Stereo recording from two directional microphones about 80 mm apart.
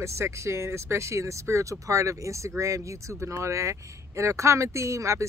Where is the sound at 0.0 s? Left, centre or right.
Right.